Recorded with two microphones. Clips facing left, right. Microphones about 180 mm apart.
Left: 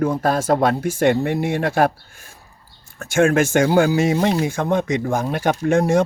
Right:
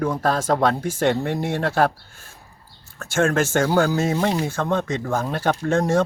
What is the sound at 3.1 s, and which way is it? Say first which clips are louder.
Speech: left 4 dB; 15° left (ahead or behind).